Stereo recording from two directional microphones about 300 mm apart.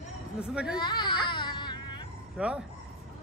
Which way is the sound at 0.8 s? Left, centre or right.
Centre.